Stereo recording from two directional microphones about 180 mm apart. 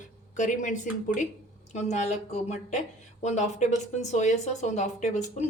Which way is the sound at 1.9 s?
40° left (ahead or behind).